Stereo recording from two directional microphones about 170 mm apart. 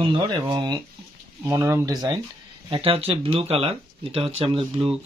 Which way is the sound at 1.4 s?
15° right (ahead or behind).